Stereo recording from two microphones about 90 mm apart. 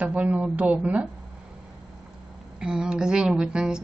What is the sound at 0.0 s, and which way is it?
A woman's voice, 15° right (ahead or behind).